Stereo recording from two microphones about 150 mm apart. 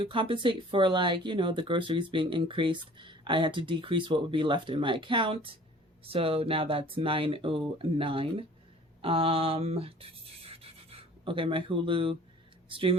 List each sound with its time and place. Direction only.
0.0 s speech: 35° right (ahead or behind)
10.5 s a sound: 40° right (ahead or behind)
12.6 s speech: 35° right (ahead or behind)